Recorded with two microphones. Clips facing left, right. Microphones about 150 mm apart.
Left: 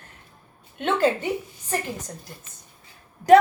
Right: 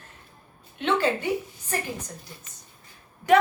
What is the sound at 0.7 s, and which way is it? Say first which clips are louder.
Speech: left 3 dB; 50° left (ahead or behind).